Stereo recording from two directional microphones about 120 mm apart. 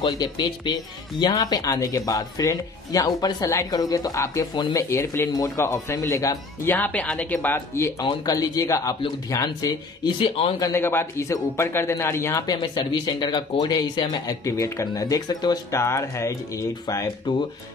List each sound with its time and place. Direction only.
0.0 s a man's voice: 35° left (ahead or behind)
6.7 s speech: 15° left (ahead or behind)
8.0 s speech: 35° left (ahead or behind)
10.6 s a man's voice: 20° left (ahead or behind)
12.7 s speech: 35° left (ahead or behind)
14.4 s a man's voice: 25° left (ahead or behind)
15.7 s a man's voice: 25° left (ahead or behind)